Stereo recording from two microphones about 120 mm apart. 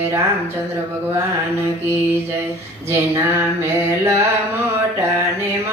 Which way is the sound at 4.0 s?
25° right (ahead or behind).